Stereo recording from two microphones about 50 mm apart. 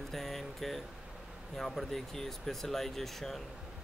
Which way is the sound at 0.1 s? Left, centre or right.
Centre.